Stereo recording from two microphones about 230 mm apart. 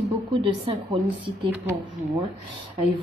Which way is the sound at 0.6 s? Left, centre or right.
Right.